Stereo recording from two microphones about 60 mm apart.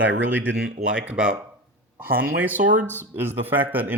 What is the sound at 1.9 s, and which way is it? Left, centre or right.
Speech, right.